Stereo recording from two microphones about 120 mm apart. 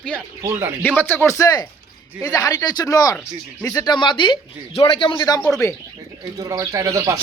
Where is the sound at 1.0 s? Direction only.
15° left (ahead or behind); by 5.4 s 35° left (ahead or behind).